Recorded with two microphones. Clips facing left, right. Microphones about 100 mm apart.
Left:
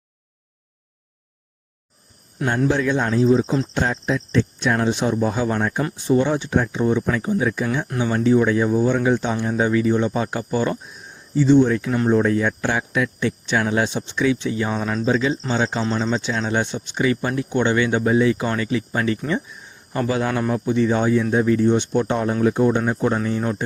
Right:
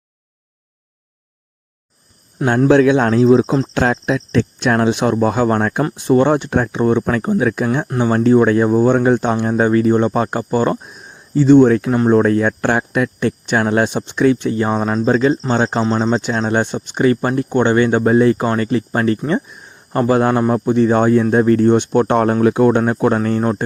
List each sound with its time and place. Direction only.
2.6 s speech: 75° right (ahead or behind)
3.8 s speech: 70° right (ahead or behind); by 10.8 s 45° right (ahead or behind)
10.8 s speech: 60° right (ahead or behind)